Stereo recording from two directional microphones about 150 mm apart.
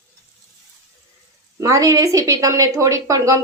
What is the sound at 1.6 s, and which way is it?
A woman's voice, 20° right (ahead or behind).